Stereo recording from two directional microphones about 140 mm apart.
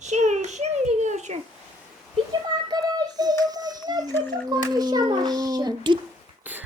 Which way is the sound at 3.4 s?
30° right (ahead or behind).